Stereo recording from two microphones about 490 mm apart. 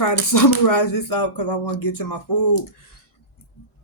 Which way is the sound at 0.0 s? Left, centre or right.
Left.